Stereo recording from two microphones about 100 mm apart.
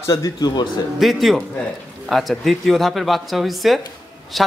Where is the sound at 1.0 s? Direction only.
Centre (ahead or behind).